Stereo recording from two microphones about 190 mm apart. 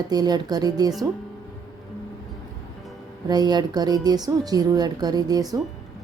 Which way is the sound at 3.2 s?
20° right (ahead or behind).